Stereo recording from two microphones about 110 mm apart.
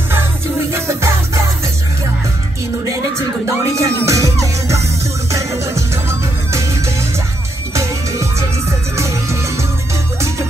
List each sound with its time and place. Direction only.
0.7 s music: 25° right (ahead or behind)
3.2 s music: 25° right (ahead or behind)
7.7 s music: 25° right (ahead or behind)